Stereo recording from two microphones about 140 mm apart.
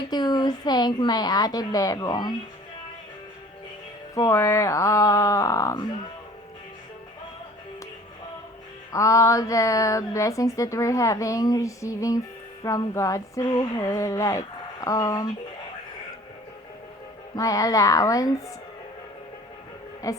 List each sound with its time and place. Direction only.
0.1 s speech: 30° left (ahead or behind)
4.1 s speech: 25° left (ahead or behind)
8.9 s speech: 20° left (ahead or behind)
17.3 s speech: 25° left (ahead or behind)